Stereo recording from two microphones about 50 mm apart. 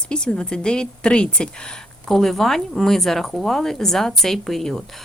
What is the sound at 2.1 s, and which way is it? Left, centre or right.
Speech, centre.